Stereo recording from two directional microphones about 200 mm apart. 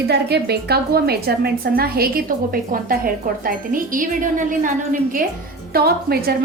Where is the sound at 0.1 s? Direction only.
55° right (ahead or behind).